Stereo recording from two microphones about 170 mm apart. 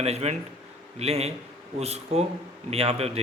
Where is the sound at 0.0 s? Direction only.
40° right (ahead or behind).